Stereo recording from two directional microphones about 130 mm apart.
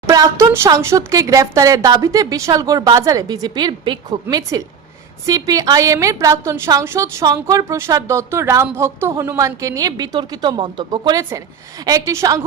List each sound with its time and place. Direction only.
0.1 s speech: 25° right (ahead or behind)